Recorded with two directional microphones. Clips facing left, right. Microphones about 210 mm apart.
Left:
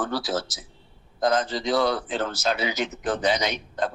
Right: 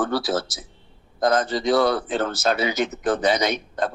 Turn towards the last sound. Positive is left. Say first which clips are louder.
# right 3 dB
turn(degrees=-50)  # may be behind; listen again after turning